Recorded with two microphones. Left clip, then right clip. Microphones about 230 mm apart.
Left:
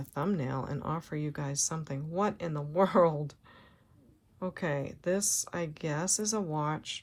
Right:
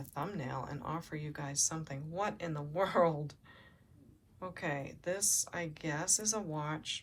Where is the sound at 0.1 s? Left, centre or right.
Left.